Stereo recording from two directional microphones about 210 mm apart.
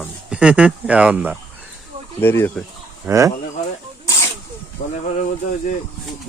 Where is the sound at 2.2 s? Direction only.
10° left (ahead or behind).